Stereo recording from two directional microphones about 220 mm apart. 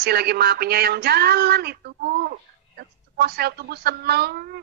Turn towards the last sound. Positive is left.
turn(degrees=-45)  # may be behind; listen again after turning